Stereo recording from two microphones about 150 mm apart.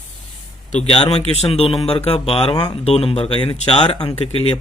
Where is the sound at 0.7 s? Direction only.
45° left (ahead or behind).